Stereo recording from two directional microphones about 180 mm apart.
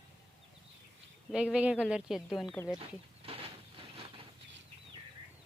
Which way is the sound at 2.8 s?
30° right (ahead or behind).